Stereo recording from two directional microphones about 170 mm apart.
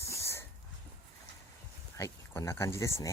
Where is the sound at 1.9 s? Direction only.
15° left (ahead or behind).